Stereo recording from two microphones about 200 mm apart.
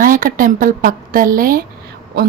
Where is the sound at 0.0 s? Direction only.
45° right (ahead or behind).